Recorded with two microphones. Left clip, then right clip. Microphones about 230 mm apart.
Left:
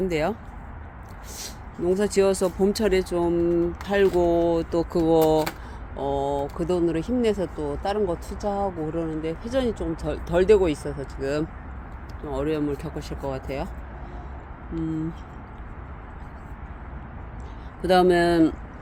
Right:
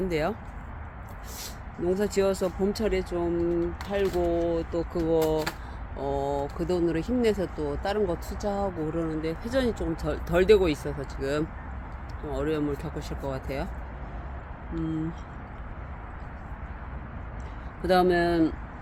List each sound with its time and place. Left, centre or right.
0.1 s speech: centre
1.4 s speech: centre; by 5.5 s left
6.0 s speech: left
17.8 s speech: left